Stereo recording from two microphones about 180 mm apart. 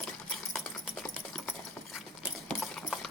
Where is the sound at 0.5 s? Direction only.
Centre (ahead or behind).